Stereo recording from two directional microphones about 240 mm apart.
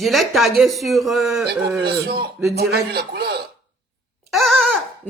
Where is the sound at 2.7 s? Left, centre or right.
Right.